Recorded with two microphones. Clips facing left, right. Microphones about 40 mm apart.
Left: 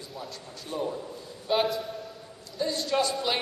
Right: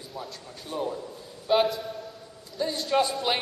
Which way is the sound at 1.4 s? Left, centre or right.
Centre.